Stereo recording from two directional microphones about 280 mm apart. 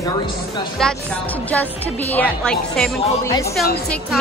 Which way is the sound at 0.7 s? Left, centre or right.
Centre.